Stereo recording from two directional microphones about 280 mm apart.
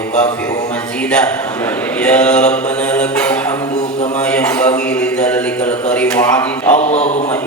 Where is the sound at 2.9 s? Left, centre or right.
Centre.